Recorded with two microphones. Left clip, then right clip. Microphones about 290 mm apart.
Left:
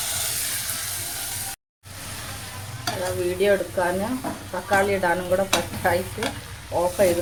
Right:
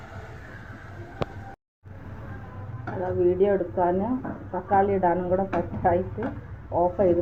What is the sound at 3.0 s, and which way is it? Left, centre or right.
Speech, centre.